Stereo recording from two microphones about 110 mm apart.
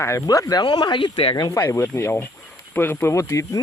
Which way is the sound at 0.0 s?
30° left (ahead or behind).